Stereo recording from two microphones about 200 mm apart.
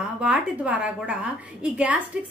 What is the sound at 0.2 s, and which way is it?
A woman's voice, 5° right (ahead or behind).